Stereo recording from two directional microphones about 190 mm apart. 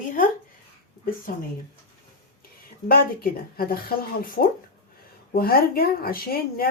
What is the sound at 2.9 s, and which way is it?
Speech, 50° left (ahead or behind).